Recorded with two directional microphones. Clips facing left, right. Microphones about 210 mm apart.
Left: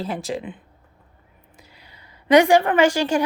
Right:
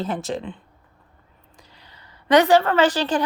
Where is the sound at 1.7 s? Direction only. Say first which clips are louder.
Even; 10° left (ahead or behind).